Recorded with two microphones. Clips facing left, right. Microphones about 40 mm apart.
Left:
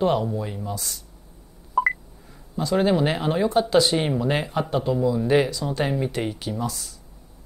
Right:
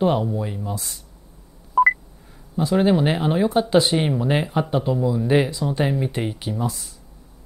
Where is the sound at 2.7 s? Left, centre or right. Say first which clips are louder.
Right 2 dB; centre.